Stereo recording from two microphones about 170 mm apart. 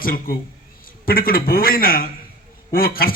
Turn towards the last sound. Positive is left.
turn(degrees=60)  # may be behind; listen again after turning